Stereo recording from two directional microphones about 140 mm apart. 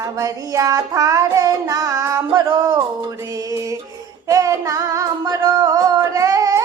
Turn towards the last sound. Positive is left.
turn(degrees=-25)  # may be behind; listen again after turning